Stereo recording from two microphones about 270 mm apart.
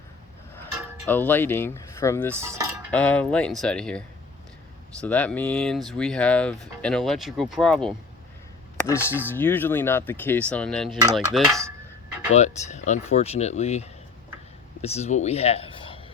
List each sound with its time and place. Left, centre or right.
1.0 s speech: centre
2.3 s cutlery: centre
2.9 s speech: centre
9.1 s speech: centre
12.3 s speech: left